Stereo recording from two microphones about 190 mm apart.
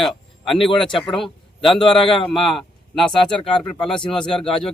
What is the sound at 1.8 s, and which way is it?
Speech, 25° left (ahead or behind).